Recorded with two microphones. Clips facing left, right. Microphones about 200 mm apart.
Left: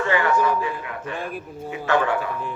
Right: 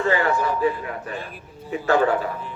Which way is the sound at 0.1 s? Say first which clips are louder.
Left 3 dB; 35° right (ahead or behind).